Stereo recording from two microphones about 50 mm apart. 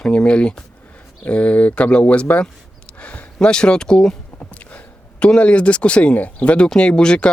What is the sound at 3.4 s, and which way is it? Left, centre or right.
Speech, centre.